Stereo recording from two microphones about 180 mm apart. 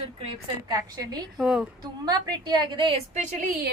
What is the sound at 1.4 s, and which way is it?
Speech, 5° right (ahead or behind).